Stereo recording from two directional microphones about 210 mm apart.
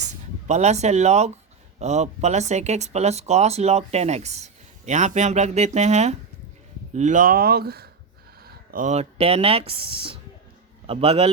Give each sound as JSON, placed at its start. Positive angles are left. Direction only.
{"t": 0.4, "sound": "a man's voice", "side_deg": -35}